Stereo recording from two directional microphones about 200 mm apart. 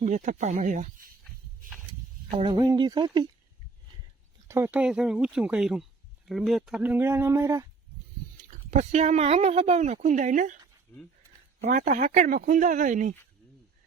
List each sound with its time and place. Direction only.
0.0 s speech: 35° right (ahead or behind)
2.4 s speech: 20° right (ahead or behind)
4.4 s speech: 10° right (ahead or behind)
8.4 s speech: 35° right (ahead or behind)
10.9 s speech: 10° left (ahead or behind)
11.6 s speech: 40° right (ahead or behind)